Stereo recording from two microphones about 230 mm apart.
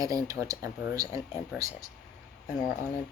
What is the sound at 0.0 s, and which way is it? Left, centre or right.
Speech, centre.